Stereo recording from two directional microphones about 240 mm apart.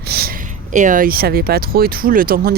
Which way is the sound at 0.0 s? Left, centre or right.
Right.